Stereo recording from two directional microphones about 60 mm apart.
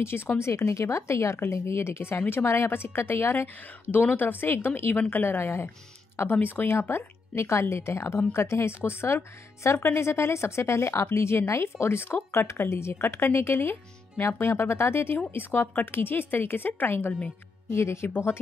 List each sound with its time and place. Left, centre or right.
0.4 s a woman's voice: left